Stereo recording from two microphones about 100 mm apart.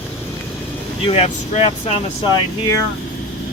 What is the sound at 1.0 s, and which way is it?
Speech, 90° left.